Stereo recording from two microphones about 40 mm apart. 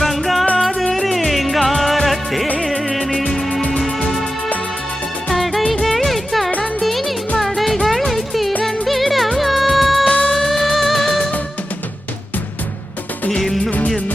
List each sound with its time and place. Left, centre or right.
0.0 s music: centre
5.3 s music of bollywood: centre
5.8 s music: centre
10.1 s music: left
10.3 s music: centre
13.7 s music: left